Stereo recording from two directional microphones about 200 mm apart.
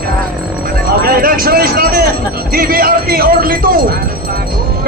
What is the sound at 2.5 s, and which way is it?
Speech, 45° right (ahead or behind).